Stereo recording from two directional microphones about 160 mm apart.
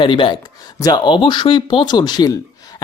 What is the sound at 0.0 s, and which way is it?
Speech, 30° left (ahead or behind).